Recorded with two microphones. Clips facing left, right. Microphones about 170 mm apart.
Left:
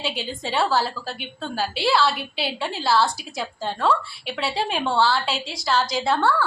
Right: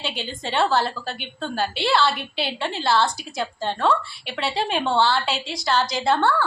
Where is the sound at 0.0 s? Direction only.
Centre (ahead or behind).